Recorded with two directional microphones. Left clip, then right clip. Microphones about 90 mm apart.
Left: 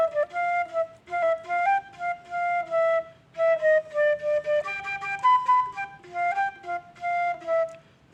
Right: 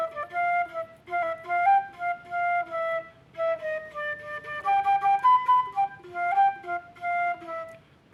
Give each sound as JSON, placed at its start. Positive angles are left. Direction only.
{"t": 0.0, "sound": "flute", "side_deg": 20}